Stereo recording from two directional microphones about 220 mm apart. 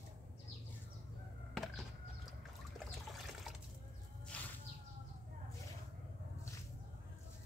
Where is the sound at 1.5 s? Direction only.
Centre (ahead or behind).